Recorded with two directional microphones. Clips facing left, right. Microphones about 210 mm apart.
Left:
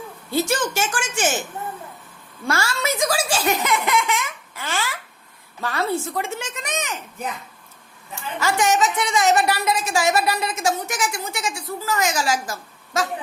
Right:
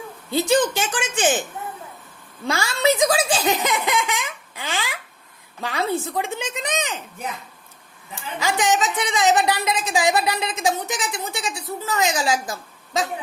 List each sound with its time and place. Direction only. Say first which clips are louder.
0.3 s a woman's voice: right 3 dB; 15° right (ahead or behind)
2.5 s a woman's voice: right 4 dB; 15° right (ahead or behind)
8.4 s a woman's voice: left 1 dB; 15° right (ahead or behind)